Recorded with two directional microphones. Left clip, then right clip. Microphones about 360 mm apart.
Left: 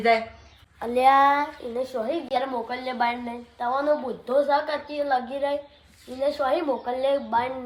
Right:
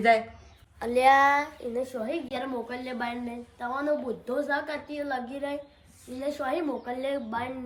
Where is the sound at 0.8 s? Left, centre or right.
Centre.